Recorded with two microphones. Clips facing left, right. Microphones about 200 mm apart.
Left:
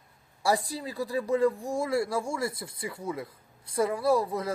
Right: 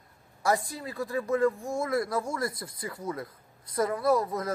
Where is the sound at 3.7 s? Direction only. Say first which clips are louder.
Even; 25° left (ahead or behind).